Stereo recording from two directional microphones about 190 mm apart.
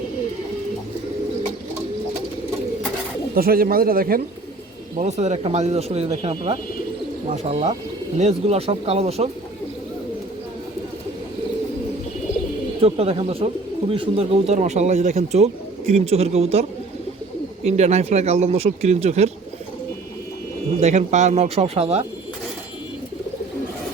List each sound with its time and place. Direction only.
3.3 s speech: 50° right (ahead or behind)
4.9 s speech: 35° right (ahead or behind)
12.8 s speech: 30° right (ahead or behind)
20.8 s speech: 40° right (ahead or behind)